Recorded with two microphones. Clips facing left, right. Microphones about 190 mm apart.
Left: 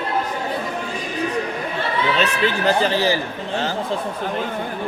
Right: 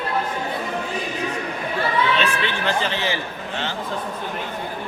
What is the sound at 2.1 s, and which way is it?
Speech, 40° left (ahead or behind).